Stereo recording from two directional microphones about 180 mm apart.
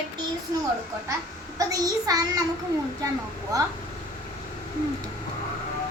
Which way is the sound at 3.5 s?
20° right (ahead or behind).